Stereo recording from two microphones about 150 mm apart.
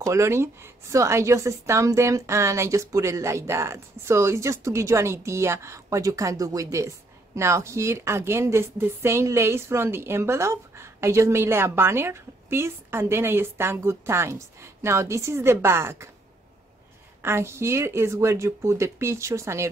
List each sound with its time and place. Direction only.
0.0 s a woman's voice: 20° right (ahead or behind)
17.2 s a woman's voice: 15° right (ahead or behind)